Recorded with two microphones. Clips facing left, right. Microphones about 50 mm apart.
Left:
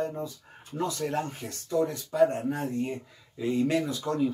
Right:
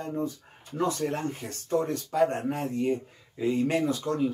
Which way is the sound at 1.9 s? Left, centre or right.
Right.